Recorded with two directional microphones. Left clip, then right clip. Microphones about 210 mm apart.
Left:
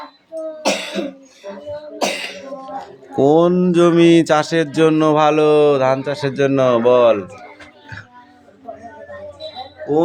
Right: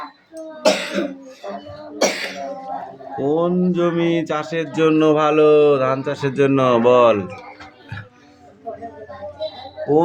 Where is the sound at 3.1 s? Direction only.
40° left (ahead or behind); by 7.2 s centre (ahead or behind).